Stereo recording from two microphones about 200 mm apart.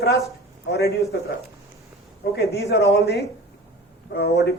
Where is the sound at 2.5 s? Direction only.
55° left (ahead or behind).